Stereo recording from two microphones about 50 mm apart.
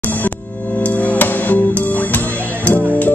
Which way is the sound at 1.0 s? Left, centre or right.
Left.